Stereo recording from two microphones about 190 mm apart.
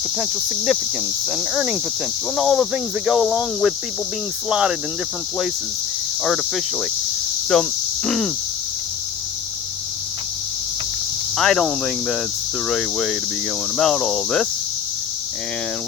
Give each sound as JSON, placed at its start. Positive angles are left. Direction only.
{"t": 0.2, "sound": "speech", "side_deg": -5}
{"t": 6.2, "sound": "speech", "side_deg": 0}
{"t": 11.3, "sound": "speech", "side_deg": 0}